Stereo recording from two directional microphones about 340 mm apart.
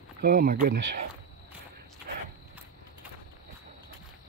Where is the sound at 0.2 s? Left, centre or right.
Right.